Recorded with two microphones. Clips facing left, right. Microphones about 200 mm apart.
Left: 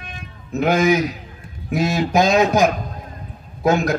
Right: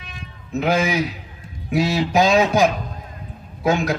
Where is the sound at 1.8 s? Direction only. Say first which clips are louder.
Even; 35° right (ahead or behind).